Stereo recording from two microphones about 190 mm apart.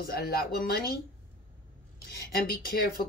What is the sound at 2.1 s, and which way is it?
Speech, 55° left (ahead or behind).